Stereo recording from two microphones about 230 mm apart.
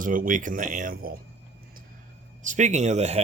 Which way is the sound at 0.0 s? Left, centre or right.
Right.